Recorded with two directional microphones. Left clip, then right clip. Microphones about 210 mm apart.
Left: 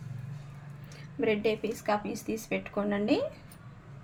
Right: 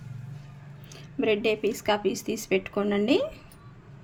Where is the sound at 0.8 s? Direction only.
45° right (ahead or behind).